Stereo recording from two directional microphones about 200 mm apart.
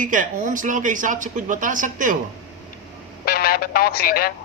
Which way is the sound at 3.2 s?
50° left (ahead or behind).